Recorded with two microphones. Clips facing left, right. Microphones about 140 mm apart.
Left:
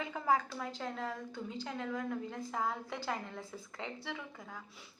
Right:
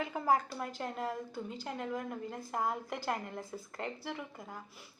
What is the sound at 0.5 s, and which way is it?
A woman's voice, 10° right (ahead or behind).